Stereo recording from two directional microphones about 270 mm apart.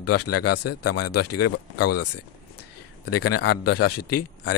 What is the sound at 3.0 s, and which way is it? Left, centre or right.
Speech, left.